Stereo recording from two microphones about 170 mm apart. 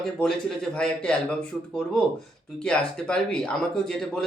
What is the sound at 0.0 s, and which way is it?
Speech, centre (ahead or behind).